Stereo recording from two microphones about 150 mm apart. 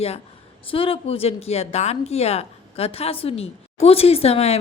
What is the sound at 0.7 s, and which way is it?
A woman's voice, 40° left (ahead or behind).